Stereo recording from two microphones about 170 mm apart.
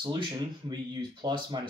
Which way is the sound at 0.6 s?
25° right (ahead or behind).